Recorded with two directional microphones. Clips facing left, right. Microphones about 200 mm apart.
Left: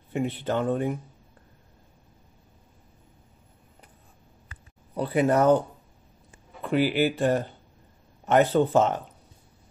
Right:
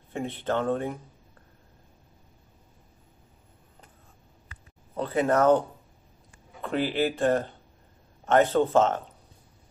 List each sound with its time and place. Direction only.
0.1 s speech: 10° left (ahead or behind)
4.9 s speech: 15° left (ahead or behind)
6.6 s speech: 5° left (ahead or behind)